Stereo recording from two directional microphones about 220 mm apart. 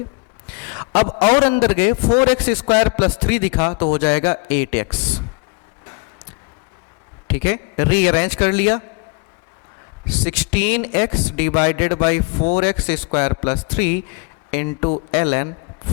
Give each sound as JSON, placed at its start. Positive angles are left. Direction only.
{"t": 0.4, "sound": "a sound", "side_deg": 10}
{"t": 0.9, "sound": "a man's voice", "side_deg": 25}
{"t": 1.4, "sound": "a man's voice", "side_deg": 10}
{"t": 7.3, "sound": "a man's voice", "side_deg": 10}
{"t": 10.1, "sound": "a man's voice", "side_deg": 10}